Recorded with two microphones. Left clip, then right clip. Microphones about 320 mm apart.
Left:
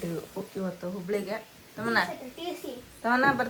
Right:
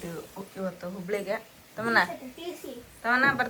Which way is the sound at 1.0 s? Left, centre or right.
Centre.